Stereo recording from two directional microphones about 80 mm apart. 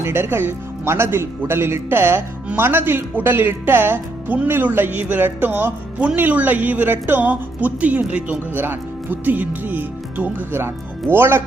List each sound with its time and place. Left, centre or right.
0.0 s a woman's voice: right